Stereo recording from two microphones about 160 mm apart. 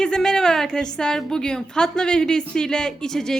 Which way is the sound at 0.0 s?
5° left (ahead or behind).